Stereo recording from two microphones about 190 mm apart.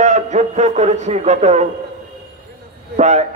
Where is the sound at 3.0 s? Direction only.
35° right (ahead or behind).